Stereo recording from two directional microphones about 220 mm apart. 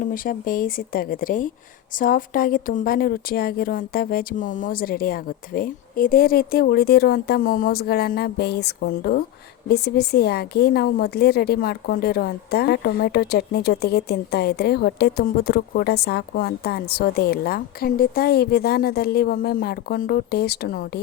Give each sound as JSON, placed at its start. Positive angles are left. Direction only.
{"t": 0.0, "sound": "speech", "side_deg": 40}